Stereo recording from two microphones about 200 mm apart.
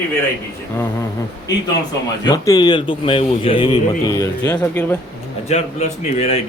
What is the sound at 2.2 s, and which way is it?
A man's voice, 20° left (ahead or behind).